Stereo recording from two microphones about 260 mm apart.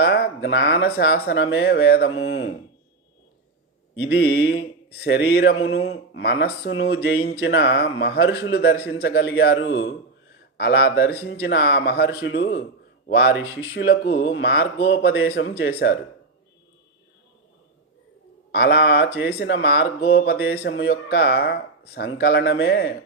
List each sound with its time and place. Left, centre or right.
0.0 s speech: left
4.1 s speech: left
8.9 s a man's voice: left
13.3 s speech: centre
14.0 s speech: left
18.5 s speech: left